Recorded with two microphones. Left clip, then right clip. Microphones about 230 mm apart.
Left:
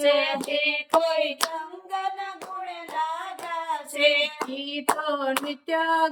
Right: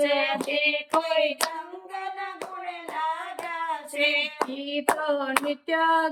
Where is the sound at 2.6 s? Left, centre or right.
Left.